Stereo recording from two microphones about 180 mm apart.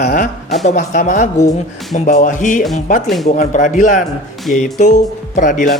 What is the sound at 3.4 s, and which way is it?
Speech, 45° left (ahead or behind).